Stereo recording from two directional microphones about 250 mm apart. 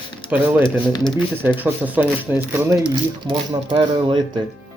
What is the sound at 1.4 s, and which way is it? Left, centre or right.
Speech, centre.